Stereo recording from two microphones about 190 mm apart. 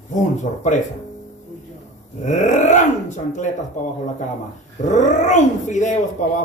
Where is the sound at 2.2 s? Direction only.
40° left (ahead or behind).